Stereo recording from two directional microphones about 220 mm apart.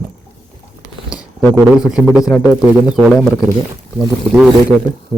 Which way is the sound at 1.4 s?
15° right (ahead or behind).